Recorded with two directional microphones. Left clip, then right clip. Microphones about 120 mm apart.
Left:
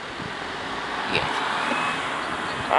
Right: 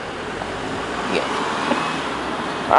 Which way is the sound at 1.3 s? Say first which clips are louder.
Right 3 dB; 25° left (ahead or behind).